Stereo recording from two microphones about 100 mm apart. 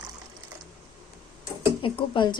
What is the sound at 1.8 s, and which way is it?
Speech, 60° left (ahead or behind).